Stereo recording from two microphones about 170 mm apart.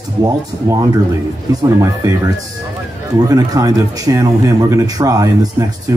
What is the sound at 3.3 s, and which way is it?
A man's voice, 20° right (ahead or behind).